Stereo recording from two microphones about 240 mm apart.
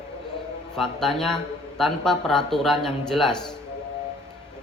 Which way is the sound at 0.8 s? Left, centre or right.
Centre.